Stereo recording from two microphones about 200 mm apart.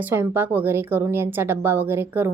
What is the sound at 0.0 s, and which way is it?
A woman's voice, 10° right (ahead or behind).